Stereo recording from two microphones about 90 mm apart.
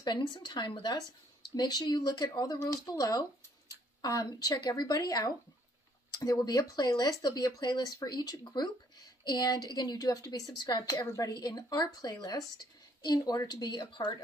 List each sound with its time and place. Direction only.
0.0 s speech: 55° left (ahead or behind)